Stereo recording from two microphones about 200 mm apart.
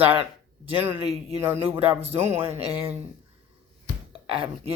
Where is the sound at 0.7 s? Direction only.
10° right (ahead or behind).